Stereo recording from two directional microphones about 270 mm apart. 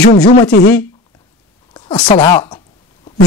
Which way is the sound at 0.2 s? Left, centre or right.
Left.